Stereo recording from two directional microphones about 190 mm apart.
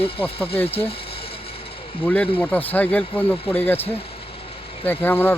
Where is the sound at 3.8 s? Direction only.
30° left (ahead or behind).